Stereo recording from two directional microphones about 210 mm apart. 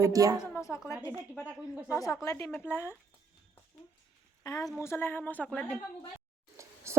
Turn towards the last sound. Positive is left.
turn(degrees=-15)  # may be behind; listen again after turning